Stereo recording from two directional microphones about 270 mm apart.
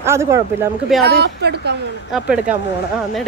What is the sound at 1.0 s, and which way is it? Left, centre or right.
Speech, right.